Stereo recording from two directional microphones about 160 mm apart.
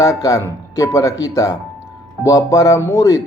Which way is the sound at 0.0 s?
20° left (ahead or behind).